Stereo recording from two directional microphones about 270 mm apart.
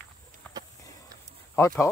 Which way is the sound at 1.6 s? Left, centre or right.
Centre.